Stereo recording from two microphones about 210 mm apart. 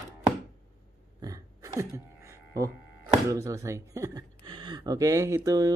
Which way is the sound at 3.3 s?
15° right (ahead or behind).